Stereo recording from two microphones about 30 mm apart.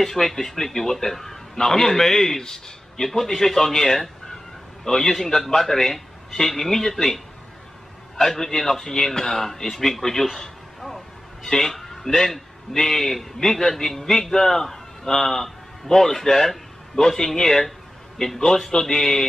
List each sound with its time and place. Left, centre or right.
0.0 s a man's voice: centre
8.3 s a man's voice: centre
11.4 s a man's voice: centre